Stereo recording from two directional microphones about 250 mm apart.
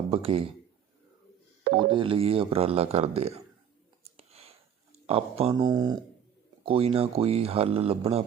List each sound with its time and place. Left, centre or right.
0.1 s speech: right
1.8 s speech: centre
4.0 s a sound: right
5.0 s speech: right